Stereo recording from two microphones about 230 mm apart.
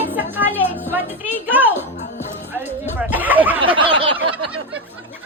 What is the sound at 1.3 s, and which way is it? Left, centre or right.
Music, centre.